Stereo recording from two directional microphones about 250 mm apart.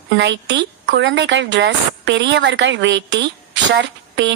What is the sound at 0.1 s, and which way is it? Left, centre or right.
A woman's voice, right.